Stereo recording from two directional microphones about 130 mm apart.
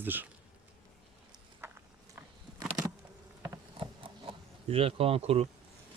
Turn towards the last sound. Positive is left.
turn(degrees=-50)  # may be behind; listen again after turning